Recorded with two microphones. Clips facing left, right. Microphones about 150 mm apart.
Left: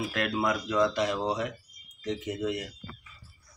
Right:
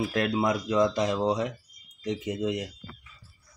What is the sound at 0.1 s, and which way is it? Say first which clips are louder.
Speech: right 3 dB; 25° right (ahead or behind).